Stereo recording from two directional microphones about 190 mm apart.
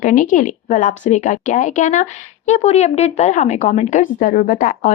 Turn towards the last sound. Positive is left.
turn(degrees=45)  # may be behind; listen again after turning